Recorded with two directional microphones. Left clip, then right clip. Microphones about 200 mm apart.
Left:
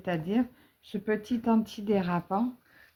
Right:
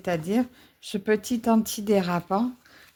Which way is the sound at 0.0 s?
40° right (ahead or behind).